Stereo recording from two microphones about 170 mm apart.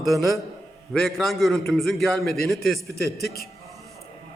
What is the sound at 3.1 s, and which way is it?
Speech, 65° left (ahead or behind).